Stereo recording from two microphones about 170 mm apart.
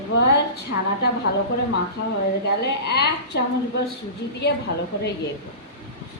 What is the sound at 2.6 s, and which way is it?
Speech, 75° left (ahead or behind).